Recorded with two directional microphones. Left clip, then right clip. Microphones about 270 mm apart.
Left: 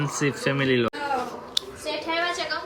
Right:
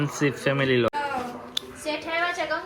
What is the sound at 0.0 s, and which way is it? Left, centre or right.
Speech, centre.